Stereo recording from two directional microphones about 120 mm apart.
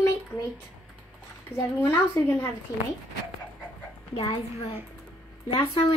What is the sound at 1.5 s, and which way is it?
Speech, 20° left (ahead or behind).